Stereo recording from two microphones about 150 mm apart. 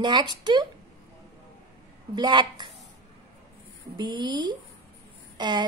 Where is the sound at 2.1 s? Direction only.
30° right (ahead or behind).